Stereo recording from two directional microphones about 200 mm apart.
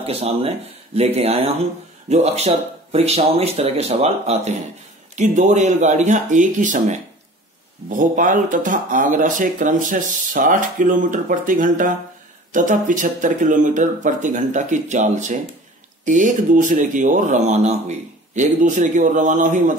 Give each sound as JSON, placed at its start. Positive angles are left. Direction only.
{"t": 0.0, "sound": "speech", "side_deg": -30}